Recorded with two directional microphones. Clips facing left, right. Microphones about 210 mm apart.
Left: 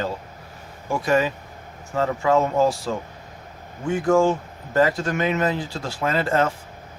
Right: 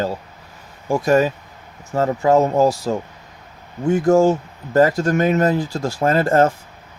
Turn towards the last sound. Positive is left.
turn(degrees=-45)  # may be behind; listen again after turning